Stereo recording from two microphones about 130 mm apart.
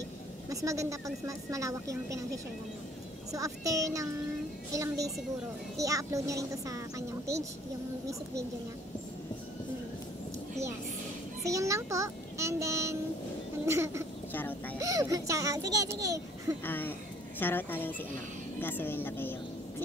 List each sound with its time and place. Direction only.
0.5 s speech: 25° right (ahead or behind)
11.4 s speech: 25° right (ahead or behind)
14.3 s speech: 15° left (ahead or behind)
14.8 s speech: 25° right (ahead or behind)
16.6 s speech: 15° left (ahead or behind)